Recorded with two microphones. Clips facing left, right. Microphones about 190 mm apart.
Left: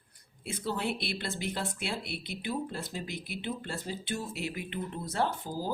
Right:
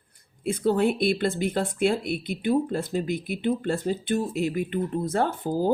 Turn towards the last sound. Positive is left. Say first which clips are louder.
# right 9 dB
turn(degrees=-55)  # may be behind; listen again after turning